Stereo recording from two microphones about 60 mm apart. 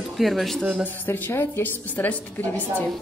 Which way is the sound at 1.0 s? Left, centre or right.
Left.